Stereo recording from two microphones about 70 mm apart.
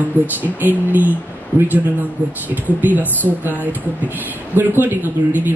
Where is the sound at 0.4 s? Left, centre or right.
Right.